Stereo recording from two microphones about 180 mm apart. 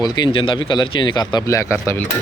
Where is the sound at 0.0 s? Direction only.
25° left (ahead or behind).